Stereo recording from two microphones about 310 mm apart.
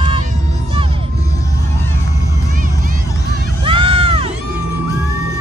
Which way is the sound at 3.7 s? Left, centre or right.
Centre.